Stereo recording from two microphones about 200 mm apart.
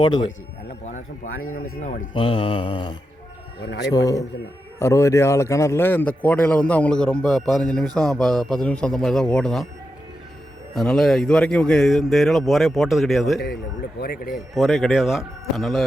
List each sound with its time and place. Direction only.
0.0 s mantra: 20° left (ahead or behind)
0.9 s speech: 40° left (ahead or behind)
1.3 s speech: 90° left
2.1 s mantra: 25° left (ahead or behind)
3.8 s a man's voice: 20° left (ahead or behind); by 9.6 s centre (ahead or behind)
10.8 s speech: centre (ahead or behind)
14.0 s speech: 50° left (ahead or behind)
14.5 s speech: centre (ahead or behind)